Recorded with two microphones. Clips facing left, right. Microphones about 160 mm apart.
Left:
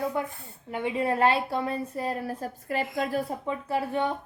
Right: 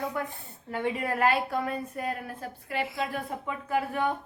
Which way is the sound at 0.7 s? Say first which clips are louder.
Left 3 dB; 20° left (ahead or behind).